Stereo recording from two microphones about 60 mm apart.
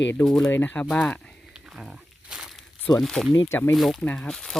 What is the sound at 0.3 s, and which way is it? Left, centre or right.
Speech, centre.